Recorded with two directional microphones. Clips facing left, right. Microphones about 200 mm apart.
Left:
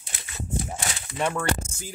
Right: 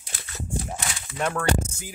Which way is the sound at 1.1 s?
5° left (ahead or behind).